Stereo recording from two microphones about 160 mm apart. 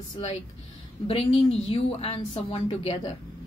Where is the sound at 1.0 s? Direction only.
40° left (ahead or behind).